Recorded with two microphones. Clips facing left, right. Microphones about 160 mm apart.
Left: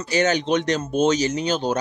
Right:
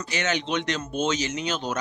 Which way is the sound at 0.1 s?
40° left (ahead or behind).